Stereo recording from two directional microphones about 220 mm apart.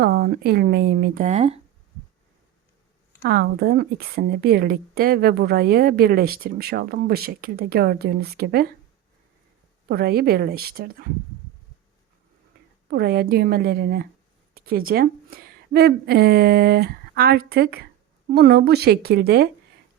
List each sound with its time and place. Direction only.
0.0 s a woman's voice: 45° right (ahead or behind); by 1.6 s 30° right (ahead or behind)
3.2 s a woman's voice: 45° right (ahead or behind)
9.9 s a woman's voice: 45° right (ahead or behind)
12.9 s a woman's voice: 45° right (ahead or behind)